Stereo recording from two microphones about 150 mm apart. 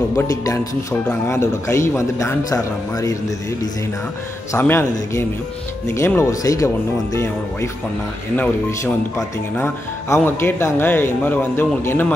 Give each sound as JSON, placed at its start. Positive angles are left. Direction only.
{"t": 0.3, "sound": "a man's voice", "side_deg": 25}
{"t": 4.5, "sound": "a man's voice", "side_deg": 15}
{"t": 8.4, "sound": "speech", "side_deg": 15}